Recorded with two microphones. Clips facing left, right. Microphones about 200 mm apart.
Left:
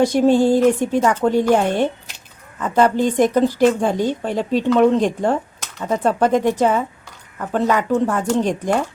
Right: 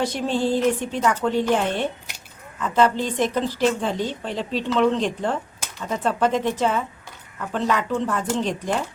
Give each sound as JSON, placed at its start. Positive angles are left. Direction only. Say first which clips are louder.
{"t": 0.0, "sound": "a woman's voice", "louder": "left 9 dB", "side_deg": 45}